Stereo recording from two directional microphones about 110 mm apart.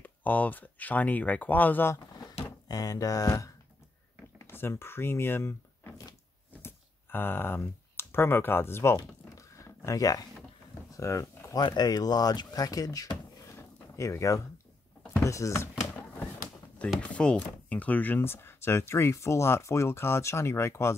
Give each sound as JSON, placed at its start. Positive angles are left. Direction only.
{"t": 0.0, "sound": "speech", "side_deg": 15}
{"t": 2.7, "sound": "speech", "side_deg": 35}
{"t": 8.9, "sound": "a sound", "side_deg": 30}
{"t": 11.6, "sound": "speech", "side_deg": 40}
{"t": 13.6, "sound": "a sound", "side_deg": 25}
{"t": 15.2, "sound": "speech", "side_deg": 25}
{"t": 17.0, "sound": "speech", "side_deg": 10}